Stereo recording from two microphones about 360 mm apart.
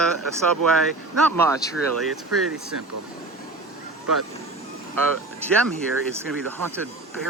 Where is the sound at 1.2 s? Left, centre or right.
Centre.